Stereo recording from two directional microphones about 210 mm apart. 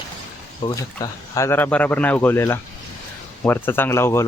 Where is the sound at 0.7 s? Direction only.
15° left (ahead or behind).